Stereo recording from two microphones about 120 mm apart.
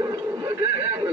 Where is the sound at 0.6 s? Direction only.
20° right (ahead or behind).